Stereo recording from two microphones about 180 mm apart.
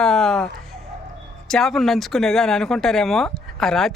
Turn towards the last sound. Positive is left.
turn(degrees=0)  # may be behind; listen again after turning